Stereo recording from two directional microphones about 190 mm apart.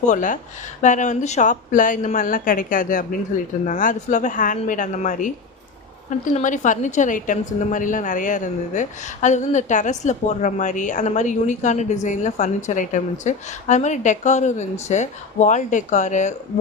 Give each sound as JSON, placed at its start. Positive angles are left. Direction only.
{"t": 0.1, "sound": "a woman's voice", "side_deg": 45}